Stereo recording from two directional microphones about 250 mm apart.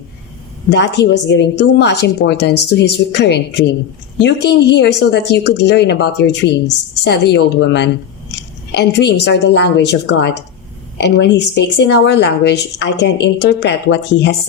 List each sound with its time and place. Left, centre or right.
0.7 s speech: left